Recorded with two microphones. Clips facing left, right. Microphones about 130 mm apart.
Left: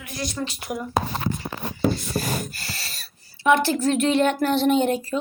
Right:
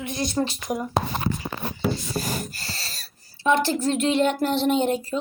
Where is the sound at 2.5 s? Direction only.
30° right (ahead or behind).